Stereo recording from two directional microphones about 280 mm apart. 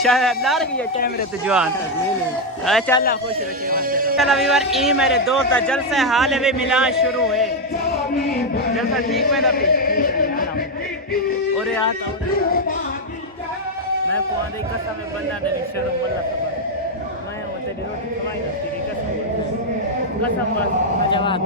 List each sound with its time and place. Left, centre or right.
0.0 s a man's voice: centre
3.7 s speech: right
4.2 s a man's voice: centre
8.3 s speech: left
8.7 s a man's voice: centre
9.7 s a sound: left
11.5 s a man's voice: centre
21.1 s a man's voice: centre